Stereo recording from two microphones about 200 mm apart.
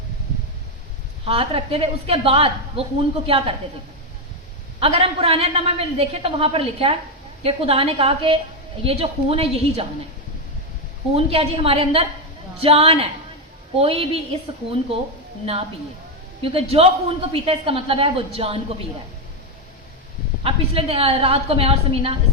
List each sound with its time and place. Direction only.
1.2 s a woman's voice: 30° right (ahead or behind)
4.8 s a woman's voice: 30° right (ahead or behind)
11.1 s a woman's voice: 30° right (ahead or behind)
16.4 s a woman's voice: 30° right (ahead or behind)
20.4 s a woman's voice: 30° right (ahead or behind)